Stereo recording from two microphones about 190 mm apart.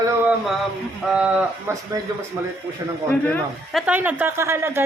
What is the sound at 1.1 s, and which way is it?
Speech, 5° right (ahead or behind).